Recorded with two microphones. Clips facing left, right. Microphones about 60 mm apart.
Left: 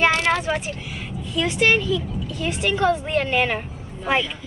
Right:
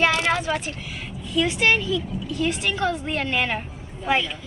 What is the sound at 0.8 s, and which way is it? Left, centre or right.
Speech, centre.